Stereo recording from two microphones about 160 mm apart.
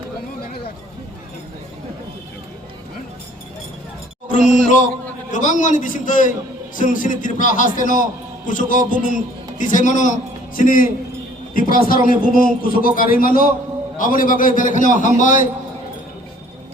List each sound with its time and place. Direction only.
5.3 s a man's voice: 55° left (ahead or behind)